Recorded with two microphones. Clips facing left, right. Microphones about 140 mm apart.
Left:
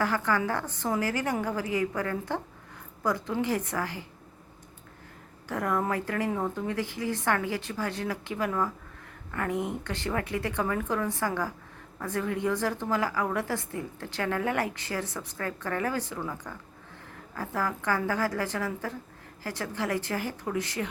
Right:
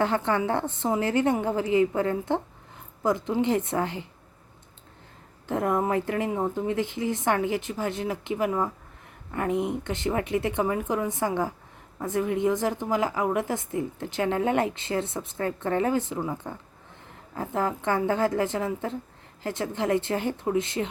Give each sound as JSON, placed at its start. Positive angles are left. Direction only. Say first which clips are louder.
{"t": 0.0, "sound": "a woman's voice", "louder": "right 3 dB", "side_deg": -25}
{"t": 5.5, "sound": "a woman's voice", "louder": "right 4 dB", "side_deg": -25}